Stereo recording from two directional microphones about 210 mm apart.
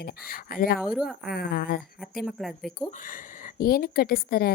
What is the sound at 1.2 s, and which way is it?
Speech, 45° left (ahead or behind).